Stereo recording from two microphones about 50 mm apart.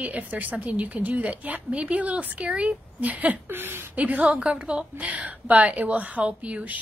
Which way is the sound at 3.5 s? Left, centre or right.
Right.